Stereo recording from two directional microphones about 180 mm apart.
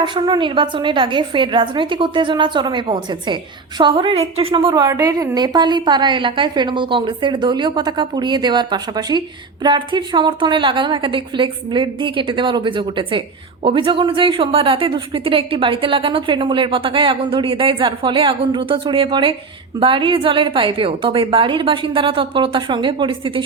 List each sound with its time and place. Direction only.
0.0 s a woman's voice: 25° right (ahead or behind)